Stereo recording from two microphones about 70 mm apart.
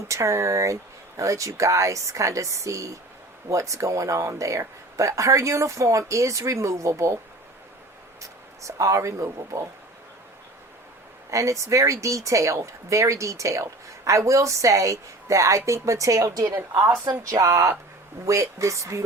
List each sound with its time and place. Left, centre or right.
0.1 s speech: right
8.6 s speech: right
11.3 s speech: right
16.6 s a woman's voice: right
17.2 s speech: right